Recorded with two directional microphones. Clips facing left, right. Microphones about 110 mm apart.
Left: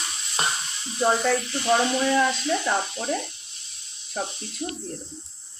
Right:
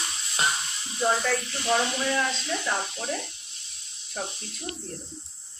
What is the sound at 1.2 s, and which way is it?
Speech, 20° left (ahead or behind).